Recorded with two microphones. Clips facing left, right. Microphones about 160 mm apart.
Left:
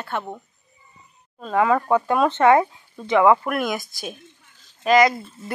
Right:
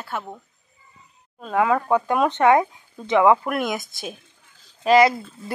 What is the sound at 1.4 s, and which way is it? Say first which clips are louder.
A woman's voice: left 1 dB; 5° right (ahead or behind).